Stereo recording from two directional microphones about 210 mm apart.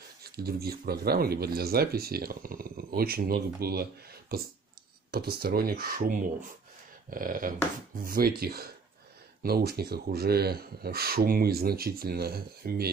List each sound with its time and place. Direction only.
0.2 s speech: 45° right (ahead or behind)